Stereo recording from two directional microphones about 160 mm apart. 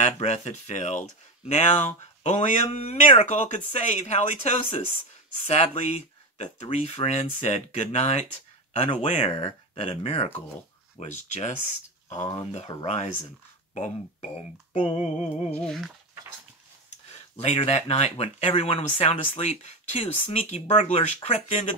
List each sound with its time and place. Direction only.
0.0 s speech: 45° left (ahead or behind)
12.5 s speech: 40° left (ahead or behind)
15.5 s a sound: 5° left (ahead or behind)
17.1 s speech: 40° left (ahead or behind)